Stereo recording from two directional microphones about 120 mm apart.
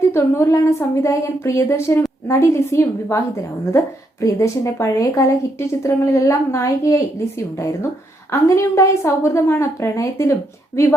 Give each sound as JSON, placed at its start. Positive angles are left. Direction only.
{"t": 0.1, "sound": "a woman's voice", "side_deg": 20}